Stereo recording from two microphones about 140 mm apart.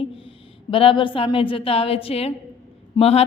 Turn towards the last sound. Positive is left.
turn(degrees=45)  # may be behind; listen again after turning